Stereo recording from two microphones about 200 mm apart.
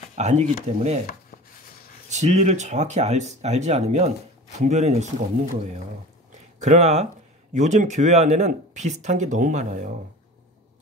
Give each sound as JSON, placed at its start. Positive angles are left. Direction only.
{"t": 0.1, "sound": "speech", "side_deg": -35}
{"t": 2.0, "sound": "speech", "side_deg": -35}
{"t": 6.6, "sound": "speech", "side_deg": -35}